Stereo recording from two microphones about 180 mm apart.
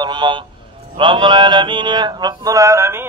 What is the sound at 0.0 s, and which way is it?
Speech, 25° right (ahead or behind).